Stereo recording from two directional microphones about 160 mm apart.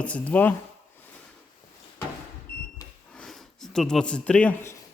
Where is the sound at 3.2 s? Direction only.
Centre (ahead or behind).